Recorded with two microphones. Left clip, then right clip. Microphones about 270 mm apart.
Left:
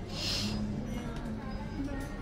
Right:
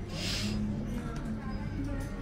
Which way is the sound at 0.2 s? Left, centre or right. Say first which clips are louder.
Left 1 dB; centre.